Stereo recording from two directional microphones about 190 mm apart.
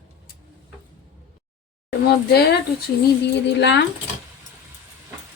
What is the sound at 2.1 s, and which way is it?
Speech, 55° left (ahead or behind).